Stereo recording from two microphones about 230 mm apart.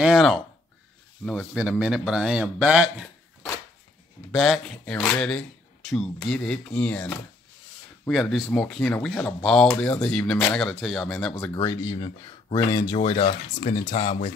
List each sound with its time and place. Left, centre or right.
0.0 s speech: centre
4.3 s speech: centre
11.5 s speech: centre